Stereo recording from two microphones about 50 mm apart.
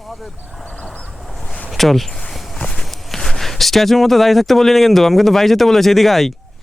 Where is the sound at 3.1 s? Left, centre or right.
Centre.